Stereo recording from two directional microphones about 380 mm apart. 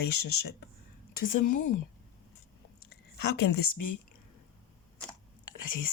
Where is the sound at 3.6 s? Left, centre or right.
Left.